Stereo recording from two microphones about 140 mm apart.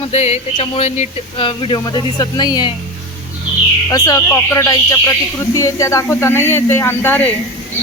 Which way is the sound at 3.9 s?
25° left (ahead or behind).